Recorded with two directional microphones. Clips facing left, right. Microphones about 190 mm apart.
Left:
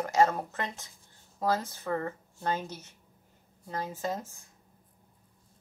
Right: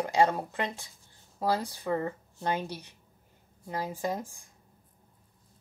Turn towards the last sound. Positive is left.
turn(degrees=-15)  # may be behind; listen again after turning